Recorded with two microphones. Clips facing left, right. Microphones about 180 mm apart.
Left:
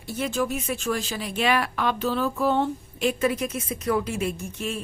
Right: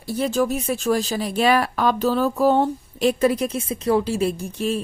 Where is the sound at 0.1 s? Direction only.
35° right (ahead or behind).